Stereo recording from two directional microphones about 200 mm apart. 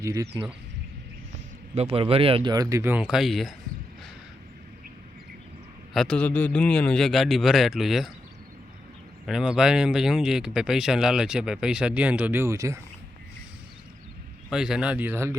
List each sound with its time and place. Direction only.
0.0 s speech: 15° right (ahead or behind)
1.7 s speech: 30° right (ahead or behind); by 3.5 s centre (ahead or behind)
5.9 s speech: centre (ahead or behind)
9.2 s speech: 5° right (ahead or behind)
14.5 s speech: 5° right (ahead or behind)